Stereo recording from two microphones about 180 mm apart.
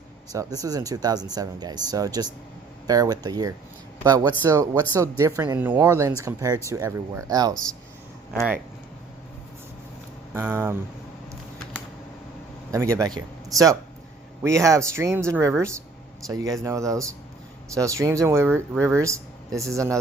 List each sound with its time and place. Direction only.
0.3 s speech: 20° right (ahead or behind)
10.3 s speech: 10° right (ahead or behind)
12.7 s speech: 20° right (ahead or behind)
14.4 s speech: 15° right (ahead or behind)